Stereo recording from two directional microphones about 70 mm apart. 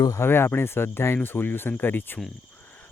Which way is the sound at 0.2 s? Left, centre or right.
Left.